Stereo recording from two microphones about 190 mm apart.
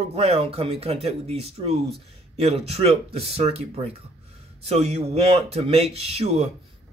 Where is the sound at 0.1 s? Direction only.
30° right (ahead or behind).